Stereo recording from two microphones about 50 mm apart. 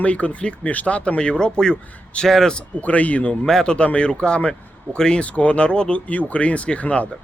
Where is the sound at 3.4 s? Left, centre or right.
Centre.